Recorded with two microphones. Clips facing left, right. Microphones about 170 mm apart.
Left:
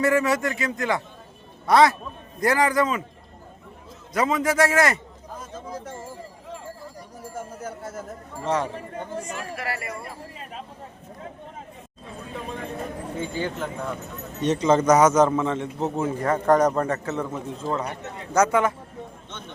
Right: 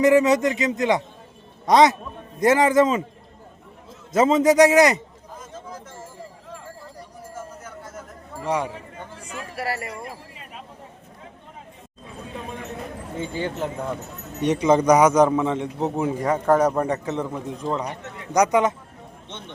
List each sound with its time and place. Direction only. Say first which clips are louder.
0.0 s a man's voice: right 5 dB; 20° right (ahead or behind)
4.1 s a man's voice: right 6 dB; 25° right (ahead or behind)
7.6 s a sound: left 4 dB; 30° left (ahead or behind)
8.4 s a man's voice: even; 10° right (ahead or behind)
9.6 s speech: right 6 dB; 40° right (ahead or behind)
13.3 s a man's voice: right 3 dB; 30° right (ahead or behind)
14.4 s a man's voice: right 2 dB; 15° right (ahead or behind)